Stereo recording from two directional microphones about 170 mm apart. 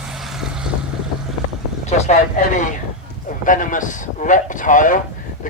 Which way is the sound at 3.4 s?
50° left (ahead or behind).